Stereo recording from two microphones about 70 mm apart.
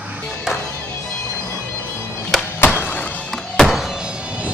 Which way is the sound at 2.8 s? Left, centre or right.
Left.